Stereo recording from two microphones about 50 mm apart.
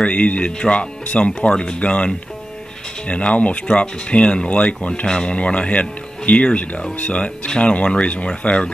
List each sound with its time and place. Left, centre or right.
0.0 s speech: left